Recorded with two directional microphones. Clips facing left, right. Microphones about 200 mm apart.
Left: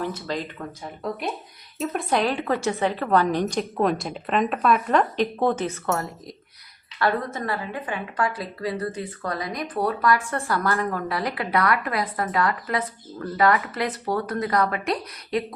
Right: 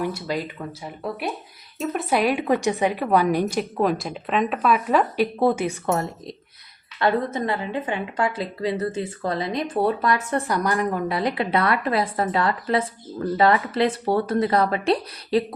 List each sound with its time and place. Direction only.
0.0 s a woman's voice: 10° right (ahead or behind); by 15.5 s 30° right (ahead or behind)